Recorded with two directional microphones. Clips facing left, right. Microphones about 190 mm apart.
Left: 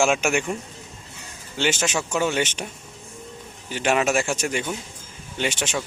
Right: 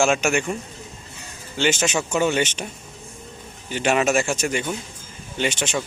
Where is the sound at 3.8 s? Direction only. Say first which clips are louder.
Right 1 dB; centre (ahead or behind).